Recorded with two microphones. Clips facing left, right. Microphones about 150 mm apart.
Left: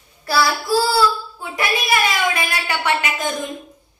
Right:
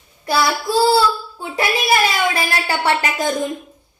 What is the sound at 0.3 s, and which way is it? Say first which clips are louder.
A child's voice: even; 20° right (ahead or behind).